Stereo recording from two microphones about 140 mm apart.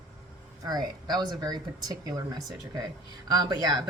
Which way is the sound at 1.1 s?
30° right (ahead or behind).